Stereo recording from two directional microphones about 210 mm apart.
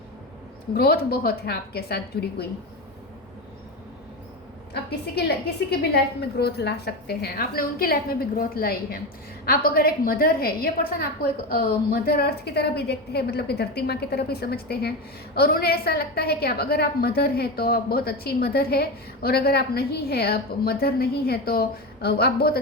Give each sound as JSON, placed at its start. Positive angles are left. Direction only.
{"t": 0.7, "sound": "a woman's voice", "side_deg": 50}
{"t": 4.7, "sound": "a woman's voice", "side_deg": 50}
{"t": 6.4, "sound": "a woman's voice", "side_deg": 50}